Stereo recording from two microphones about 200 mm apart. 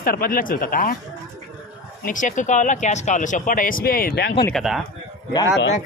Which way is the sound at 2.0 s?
40° left (ahead or behind).